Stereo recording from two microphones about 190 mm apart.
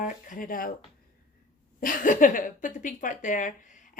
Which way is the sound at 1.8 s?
45° left (ahead or behind).